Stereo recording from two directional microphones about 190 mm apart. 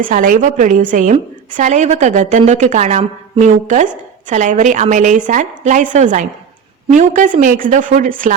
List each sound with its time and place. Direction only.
0.0 s a woman's voice: 45° right (ahead or behind)